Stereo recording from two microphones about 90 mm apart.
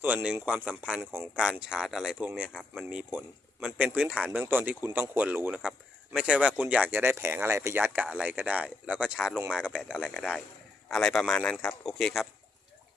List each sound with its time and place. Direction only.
0.0 s speech: 15° right (ahead or behind)
7.8 s speech: 20° right (ahead or behind)
10.9 s speech: 5° left (ahead or behind)